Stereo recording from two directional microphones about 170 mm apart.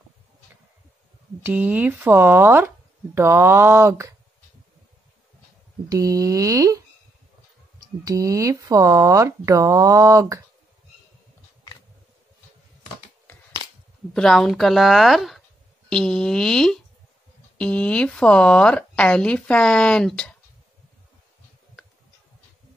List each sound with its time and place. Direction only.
1.4 s speech: 10° right (ahead or behind)
5.9 s speech: 20° right (ahead or behind)
8.0 s speech: 20° right (ahead or behind)
14.1 s speech: 5° left (ahead or behind)